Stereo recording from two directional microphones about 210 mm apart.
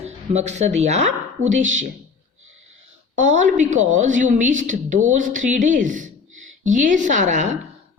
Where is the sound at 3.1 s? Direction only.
35° right (ahead or behind).